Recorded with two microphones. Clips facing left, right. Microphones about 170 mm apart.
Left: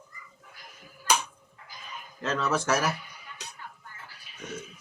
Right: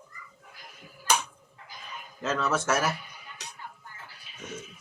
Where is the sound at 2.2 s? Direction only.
Centre (ahead or behind).